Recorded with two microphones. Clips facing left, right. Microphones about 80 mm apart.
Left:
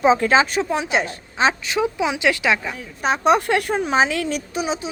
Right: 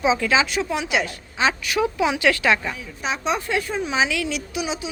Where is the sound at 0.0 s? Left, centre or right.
Left; by 2.7 s centre.